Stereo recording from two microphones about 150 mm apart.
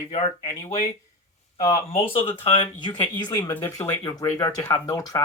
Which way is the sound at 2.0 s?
40° left (ahead or behind).